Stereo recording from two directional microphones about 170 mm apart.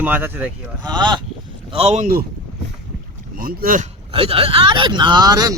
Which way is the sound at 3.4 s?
55° right (ahead or behind).